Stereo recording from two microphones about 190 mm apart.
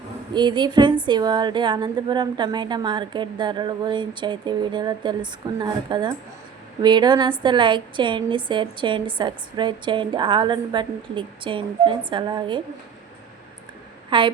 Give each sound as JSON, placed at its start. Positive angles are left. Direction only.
{"t": 0.3, "sound": "a woman's voice", "side_deg": -25}
{"t": 14.1, "sound": "a woman's voice", "side_deg": -25}